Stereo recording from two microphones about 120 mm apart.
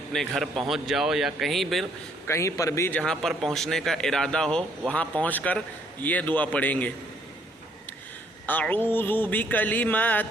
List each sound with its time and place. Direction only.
0.1 s speech: 5° left (ahead or behind)
2.2 s a man's voice: 25° left (ahead or behind)
3.0 s a man's voice: centre (ahead or behind)
8.4 s a man's voice: 15° left (ahead or behind)